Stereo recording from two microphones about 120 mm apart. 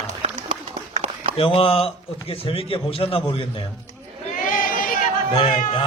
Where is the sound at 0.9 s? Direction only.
60° right (ahead or behind).